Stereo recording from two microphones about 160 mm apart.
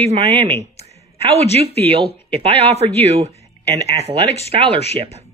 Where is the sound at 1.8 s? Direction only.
40° right (ahead or behind).